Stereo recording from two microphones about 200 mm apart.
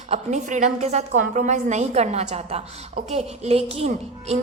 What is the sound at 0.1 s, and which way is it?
A woman's voice, 35° right (ahead or behind).